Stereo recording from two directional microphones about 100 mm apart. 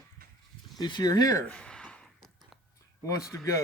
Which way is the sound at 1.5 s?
10° left (ahead or behind).